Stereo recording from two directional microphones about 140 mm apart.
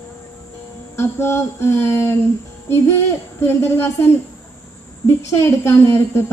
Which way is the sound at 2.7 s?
20° left (ahead or behind).